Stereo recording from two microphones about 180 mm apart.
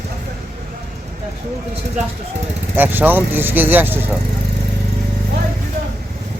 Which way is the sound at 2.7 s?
10° right (ahead or behind).